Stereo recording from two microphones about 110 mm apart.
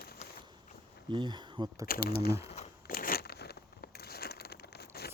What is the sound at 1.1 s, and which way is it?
Speech, 45° right (ahead or behind).